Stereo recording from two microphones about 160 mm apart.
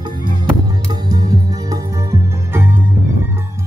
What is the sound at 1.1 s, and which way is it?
Music, 25° right (ahead or behind).